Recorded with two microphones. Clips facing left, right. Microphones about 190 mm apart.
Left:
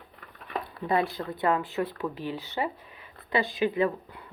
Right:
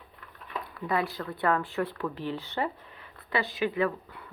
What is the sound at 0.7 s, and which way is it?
Speech, 25° left (ahead or behind).